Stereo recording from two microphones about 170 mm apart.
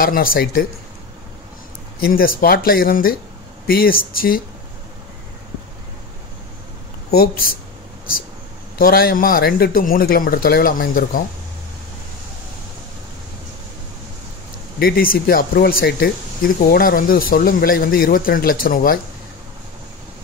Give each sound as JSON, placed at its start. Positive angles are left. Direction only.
{"t": 0.0, "sound": "speech", "side_deg": 60}
{"t": 2.0, "sound": "speech", "side_deg": 60}
{"t": 7.1, "sound": "speech", "side_deg": 60}
{"t": 8.7, "sound": "speech", "side_deg": 60}
{"t": 14.8, "sound": "speech", "side_deg": 60}